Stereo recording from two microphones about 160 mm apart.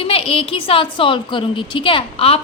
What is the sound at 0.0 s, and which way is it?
A woman's voice, 35° left (ahead or behind).